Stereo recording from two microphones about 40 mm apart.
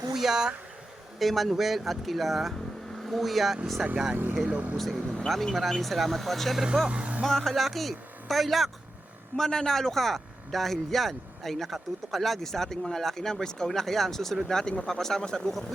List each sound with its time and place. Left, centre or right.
0.1 s speech: centre
1.2 s speech: centre
4.4 s speech: right
4.8 s speech: centre
6.8 s speech: right
7.3 s speech: centre
7.5 s speech: centre
9.3 s speech: centre
14.5 s speech: centre
15.2 s speech: left